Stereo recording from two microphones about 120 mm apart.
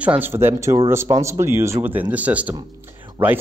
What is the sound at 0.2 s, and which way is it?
Speech, 20° right (ahead or behind).